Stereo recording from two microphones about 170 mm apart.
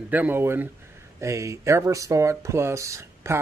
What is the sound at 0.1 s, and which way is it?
Speech, 10° right (ahead or behind).